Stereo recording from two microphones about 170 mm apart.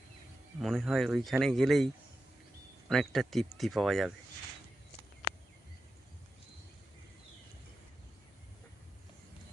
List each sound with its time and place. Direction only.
0.6 s speech: centre (ahead or behind)
2.9 s speech: centre (ahead or behind)